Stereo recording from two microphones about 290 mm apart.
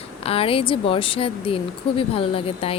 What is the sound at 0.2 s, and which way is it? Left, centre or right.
Speech, centre.